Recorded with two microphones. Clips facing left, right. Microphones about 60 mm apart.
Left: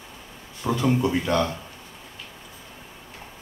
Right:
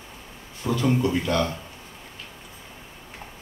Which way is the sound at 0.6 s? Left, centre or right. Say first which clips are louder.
Even; left.